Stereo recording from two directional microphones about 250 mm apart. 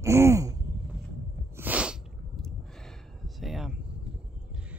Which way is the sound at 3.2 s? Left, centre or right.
Centre.